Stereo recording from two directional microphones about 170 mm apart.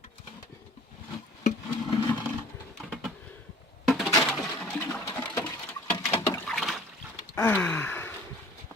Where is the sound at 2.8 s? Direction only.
Centre (ahead or behind).